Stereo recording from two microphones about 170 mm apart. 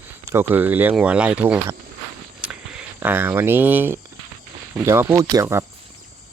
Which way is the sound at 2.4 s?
5° right (ahead or behind).